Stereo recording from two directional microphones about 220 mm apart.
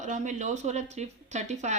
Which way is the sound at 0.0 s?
35° right (ahead or behind).